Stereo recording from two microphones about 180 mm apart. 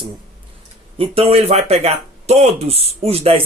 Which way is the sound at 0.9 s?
30° right (ahead or behind).